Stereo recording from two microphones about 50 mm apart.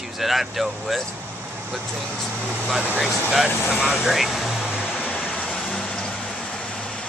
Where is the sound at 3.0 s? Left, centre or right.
Centre.